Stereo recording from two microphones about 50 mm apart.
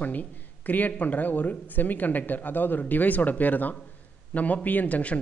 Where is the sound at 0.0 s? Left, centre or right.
Left.